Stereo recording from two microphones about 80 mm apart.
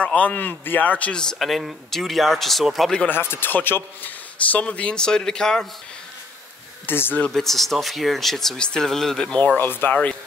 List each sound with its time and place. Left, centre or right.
0.0 s speech: centre
1.4 s speech: centre
3.1 s a man's voice: left; by 5.7 s centre
6.9 s speech: left
7.2 s speech: centre
9.4 s speech: left